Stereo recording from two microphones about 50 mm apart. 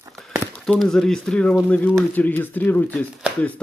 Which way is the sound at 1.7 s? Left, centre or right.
Left.